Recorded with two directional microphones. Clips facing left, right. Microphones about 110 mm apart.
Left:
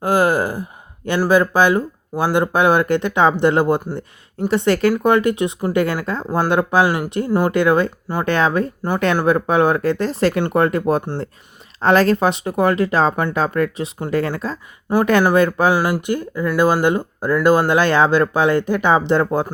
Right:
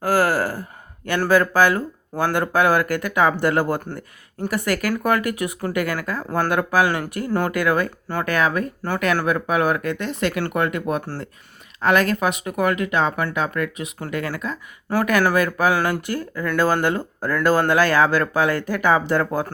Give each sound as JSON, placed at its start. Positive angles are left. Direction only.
{"t": 0.0, "sound": "a sound", "side_deg": 20}
{"t": 1.2, "sound": "speech", "side_deg": 20}
{"t": 7.5, "sound": "speech", "side_deg": 25}
{"t": 15.7, "sound": "speech", "side_deg": 15}